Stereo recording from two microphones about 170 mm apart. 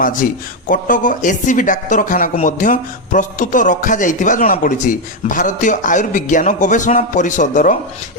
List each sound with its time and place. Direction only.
0.7 s speech: 50° left (ahead or behind)